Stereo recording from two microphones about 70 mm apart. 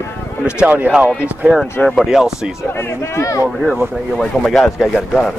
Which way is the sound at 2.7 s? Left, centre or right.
Left.